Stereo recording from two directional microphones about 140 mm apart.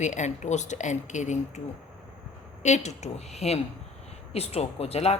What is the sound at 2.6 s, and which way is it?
A woman's voice, 55° left (ahead or behind).